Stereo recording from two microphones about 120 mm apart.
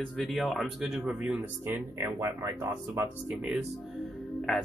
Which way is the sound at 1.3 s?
20° right (ahead or behind).